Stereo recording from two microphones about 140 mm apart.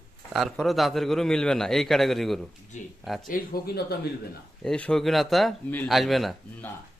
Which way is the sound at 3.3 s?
90° left.